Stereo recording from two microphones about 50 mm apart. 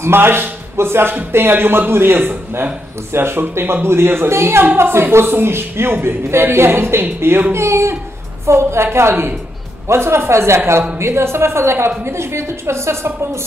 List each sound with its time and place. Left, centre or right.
0.0 s a man's voice: right
7.5 s a woman's voice: right